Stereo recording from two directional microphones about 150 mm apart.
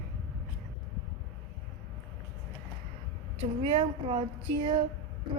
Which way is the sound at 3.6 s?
40° right (ahead or behind).